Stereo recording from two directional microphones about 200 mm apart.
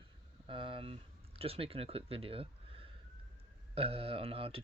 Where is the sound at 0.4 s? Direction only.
25° right (ahead or behind).